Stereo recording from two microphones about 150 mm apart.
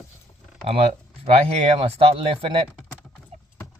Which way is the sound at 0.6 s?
40° right (ahead or behind).